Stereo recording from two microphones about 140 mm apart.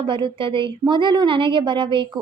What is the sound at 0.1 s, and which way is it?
A woman's voice, 35° right (ahead or behind).